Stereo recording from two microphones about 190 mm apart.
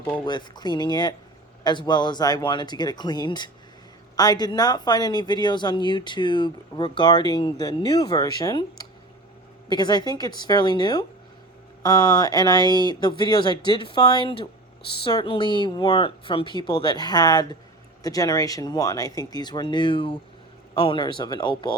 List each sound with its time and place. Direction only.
0.3 s speech: 20° left (ahead or behind)